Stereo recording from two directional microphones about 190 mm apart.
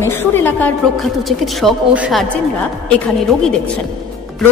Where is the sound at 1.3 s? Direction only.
Centre (ahead or behind).